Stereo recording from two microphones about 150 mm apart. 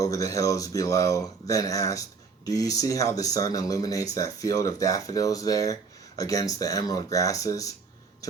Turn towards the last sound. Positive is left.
turn(degrees=20)  # may be behind; listen again after turning